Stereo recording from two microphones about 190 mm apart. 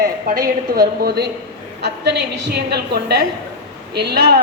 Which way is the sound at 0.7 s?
55° right (ahead or behind).